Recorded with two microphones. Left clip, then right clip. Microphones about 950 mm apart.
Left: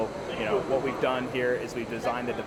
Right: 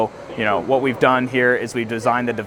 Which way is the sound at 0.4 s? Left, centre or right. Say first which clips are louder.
Right 10 dB; right.